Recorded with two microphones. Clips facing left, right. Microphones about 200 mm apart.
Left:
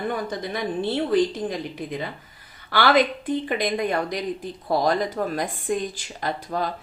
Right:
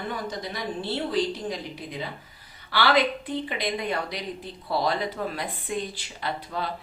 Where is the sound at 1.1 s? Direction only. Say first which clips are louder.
Left 6 dB; 50° left (ahead or behind).